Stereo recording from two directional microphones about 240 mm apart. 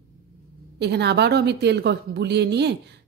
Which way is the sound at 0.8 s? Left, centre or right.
Right.